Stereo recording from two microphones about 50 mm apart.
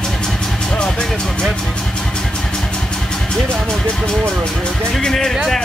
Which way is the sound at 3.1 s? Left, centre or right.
Centre.